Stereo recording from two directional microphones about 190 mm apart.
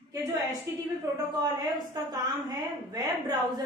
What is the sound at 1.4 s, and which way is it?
A woman's voice, 20° right (ahead or behind).